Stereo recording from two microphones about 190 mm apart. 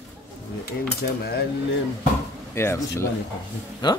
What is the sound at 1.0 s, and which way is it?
Cutlery, 55° left (ahead or behind).